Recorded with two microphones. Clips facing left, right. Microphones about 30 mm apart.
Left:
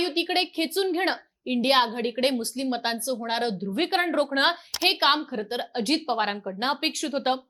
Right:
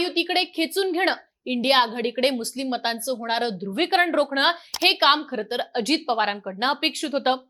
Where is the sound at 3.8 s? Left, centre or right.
Right.